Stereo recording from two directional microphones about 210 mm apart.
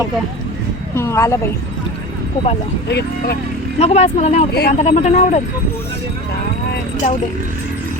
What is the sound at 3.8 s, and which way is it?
Speech, 30° left (ahead or behind).